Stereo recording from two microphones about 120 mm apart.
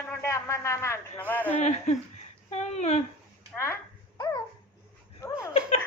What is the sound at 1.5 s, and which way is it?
Speech, 65° left (ahead or behind).